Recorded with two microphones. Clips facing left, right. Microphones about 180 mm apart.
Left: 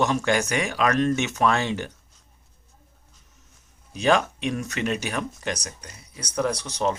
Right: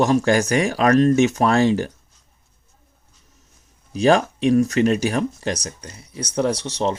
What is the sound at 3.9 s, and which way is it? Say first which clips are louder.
A man's voice: right 5 dB; 35° right (ahead or behind).